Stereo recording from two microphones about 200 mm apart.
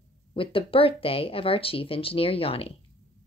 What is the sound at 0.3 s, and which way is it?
Speech, 25° left (ahead or behind).